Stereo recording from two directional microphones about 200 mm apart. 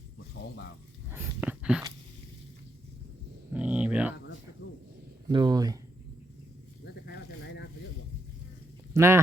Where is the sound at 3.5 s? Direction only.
5° right (ahead or behind).